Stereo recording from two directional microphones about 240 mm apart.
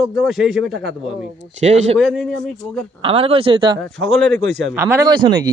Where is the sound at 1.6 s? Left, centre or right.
Right.